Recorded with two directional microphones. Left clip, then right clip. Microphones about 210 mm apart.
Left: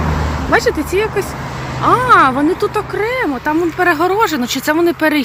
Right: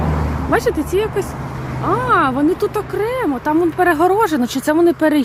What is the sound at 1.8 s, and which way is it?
Speech, centre (ahead or behind).